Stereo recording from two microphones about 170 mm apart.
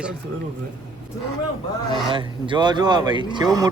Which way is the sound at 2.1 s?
30° right (ahead or behind).